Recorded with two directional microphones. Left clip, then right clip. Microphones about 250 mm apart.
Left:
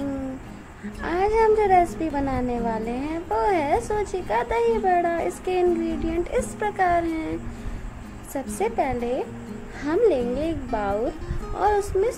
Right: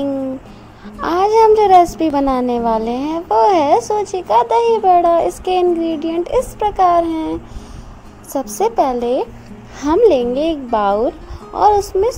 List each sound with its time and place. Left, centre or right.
1.0 s a child's voice: right